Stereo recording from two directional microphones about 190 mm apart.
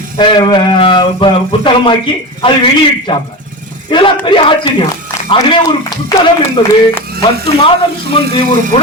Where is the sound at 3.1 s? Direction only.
25° left (ahead or behind).